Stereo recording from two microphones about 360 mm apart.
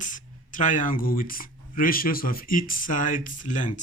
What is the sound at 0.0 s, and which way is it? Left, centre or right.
Speech, left.